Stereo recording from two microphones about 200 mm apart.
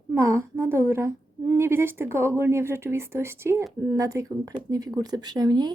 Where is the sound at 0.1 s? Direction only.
15° right (ahead or behind).